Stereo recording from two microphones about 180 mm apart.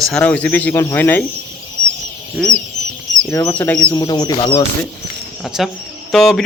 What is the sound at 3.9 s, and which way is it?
Speech, 20° left (ahead or behind).